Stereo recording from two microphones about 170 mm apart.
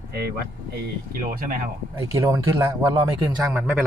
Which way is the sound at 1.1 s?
50° right (ahead or behind).